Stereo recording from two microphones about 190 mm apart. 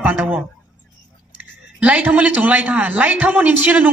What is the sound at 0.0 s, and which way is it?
Speech, 10° right (ahead or behind).